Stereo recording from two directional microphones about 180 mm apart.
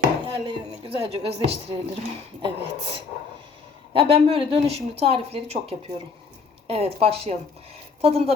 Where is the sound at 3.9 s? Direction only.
30° right (ahead or behind).